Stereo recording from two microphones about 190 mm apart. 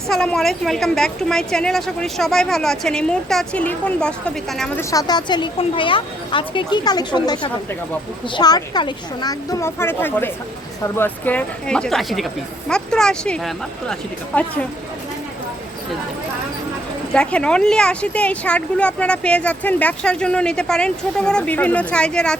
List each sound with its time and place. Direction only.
0.1 s speech: 5° left (ahead or behind)
4.8 s a woman's voice: 15° left (ahead or behind)
17.1 s speech: 5° left (ahead or behind)